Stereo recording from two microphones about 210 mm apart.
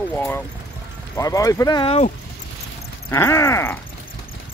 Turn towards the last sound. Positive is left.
turn(degrees=10)  # may be behind; listen again after turning